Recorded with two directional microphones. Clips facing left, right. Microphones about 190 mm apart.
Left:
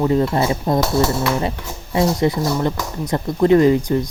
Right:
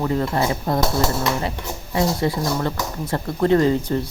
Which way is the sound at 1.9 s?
20° left (ahead or behind).